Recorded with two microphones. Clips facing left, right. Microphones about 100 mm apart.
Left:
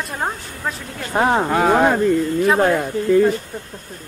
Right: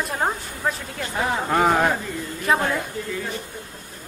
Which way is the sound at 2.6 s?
55° left (ahead or behind).